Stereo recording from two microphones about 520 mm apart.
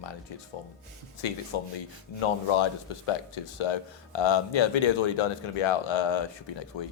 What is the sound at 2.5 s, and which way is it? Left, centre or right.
Speech, left.